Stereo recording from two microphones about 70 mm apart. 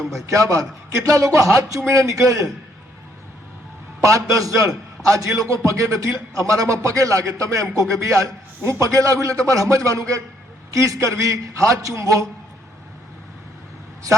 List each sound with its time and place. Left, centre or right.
0.0 s a man's voice: centre
0.3 s a man's voice: right
4.0 s a man's voice: right